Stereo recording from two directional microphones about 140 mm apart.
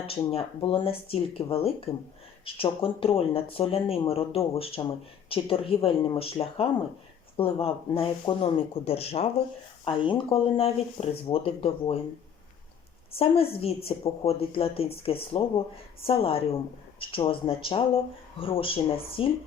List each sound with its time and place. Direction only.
0.1 s speech: 45° left (ahead or behind)
13.1 s speech: 40° left (ahead or behind)